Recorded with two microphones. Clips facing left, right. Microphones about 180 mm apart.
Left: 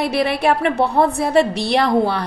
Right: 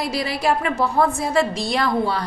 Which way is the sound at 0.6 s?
30° left (ahead or behind).